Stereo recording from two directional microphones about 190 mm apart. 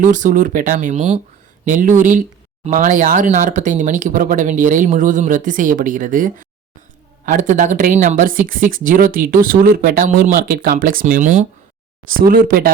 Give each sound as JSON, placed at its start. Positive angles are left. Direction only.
{"t": 0.0, "sound": "speech", "side_deg": -45}